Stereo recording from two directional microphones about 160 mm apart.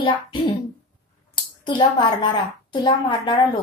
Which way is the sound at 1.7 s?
30° left (ahead or behind).